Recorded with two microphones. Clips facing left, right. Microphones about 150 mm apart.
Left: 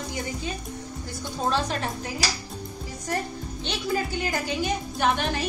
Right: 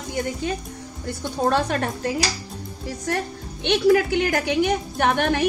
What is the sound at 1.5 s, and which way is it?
Speech, 60° right (ahead or behind).